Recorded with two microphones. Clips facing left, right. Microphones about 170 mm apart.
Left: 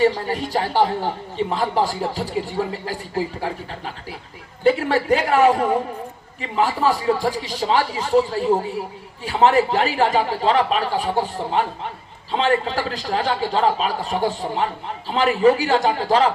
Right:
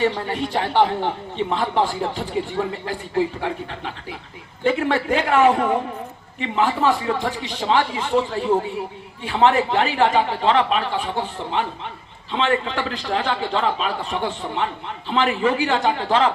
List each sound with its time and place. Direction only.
0.0 s a man's voice: 40° left (ahead or behind)